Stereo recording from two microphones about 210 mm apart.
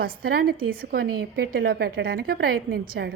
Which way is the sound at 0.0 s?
45° right (ahead or behind).